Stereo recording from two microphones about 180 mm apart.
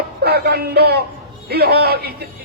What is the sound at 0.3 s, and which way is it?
A man's voice, 60° right (ahead or behind).